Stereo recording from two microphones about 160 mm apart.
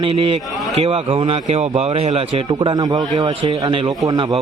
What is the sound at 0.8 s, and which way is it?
A man's voice, 35° right (ahead or behind).